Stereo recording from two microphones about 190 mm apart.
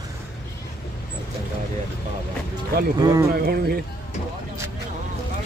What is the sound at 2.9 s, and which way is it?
Speech, 20° right (ahead or behind).